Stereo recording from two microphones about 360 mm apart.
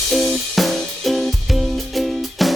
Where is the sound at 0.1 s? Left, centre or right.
Centre.